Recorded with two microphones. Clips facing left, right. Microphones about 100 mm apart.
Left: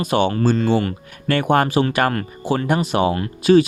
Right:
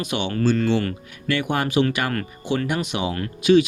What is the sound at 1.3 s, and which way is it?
Speech, 45° left (ahead or behind).